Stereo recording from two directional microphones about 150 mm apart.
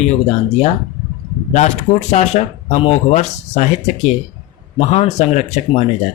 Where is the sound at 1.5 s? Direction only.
50° left (ahead or behind).